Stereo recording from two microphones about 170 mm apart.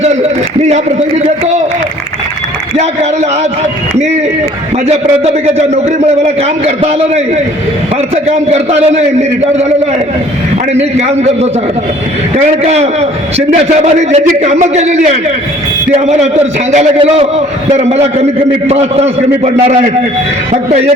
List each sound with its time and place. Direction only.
0.0 s a sound: 40° right (ahead or behind)
0.7 s a man's voice: 40° right (ahead or behind)
2.7 s a man's voice: 40° right (ahead or behind)
4.9 s a man's voice: 40° right (ahead or behind)
10.8 s a man's voice: 40° right (ahead or behind)
12.6 s a man's voice: 40° right (ahead or behind)
20.5 s a man's voice: 40° right (ahead or behind)